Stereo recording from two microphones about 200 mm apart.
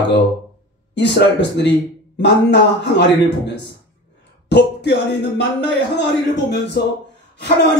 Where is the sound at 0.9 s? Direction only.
60° left (ahead or behind).